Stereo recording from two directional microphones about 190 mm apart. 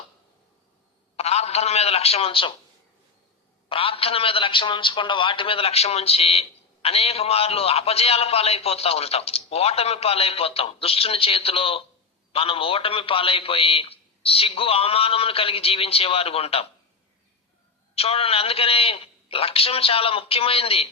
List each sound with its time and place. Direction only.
1.1 s a sound: 35° left (ahead or behind)
3.7 s a man's voice: 30° left (ahead or behind)
17.9 s a man's voice: 30° left (ahead or behind)